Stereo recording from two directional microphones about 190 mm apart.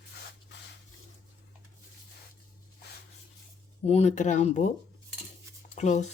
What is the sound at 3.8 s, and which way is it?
Speech, 35° left (ahead or behind).